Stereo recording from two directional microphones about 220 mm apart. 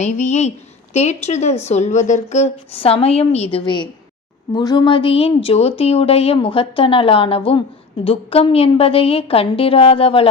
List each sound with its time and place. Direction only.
0.0 s a woman's voice: 30° left (ahead or behind)